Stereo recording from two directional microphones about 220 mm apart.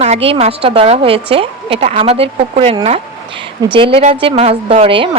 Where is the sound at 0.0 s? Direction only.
30° right (ahead or behind).